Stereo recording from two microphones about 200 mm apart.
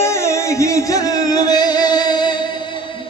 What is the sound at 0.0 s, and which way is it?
Music, 15° left (ahead or behind).